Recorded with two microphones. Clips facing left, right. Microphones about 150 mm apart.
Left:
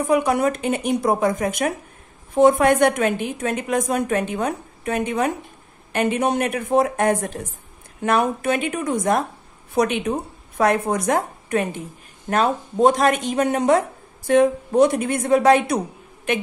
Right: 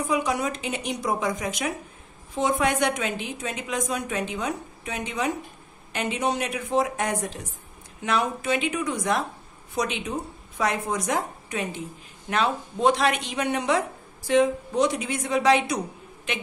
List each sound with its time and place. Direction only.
0.0 s a man's voice: 60° left (ahead or behind)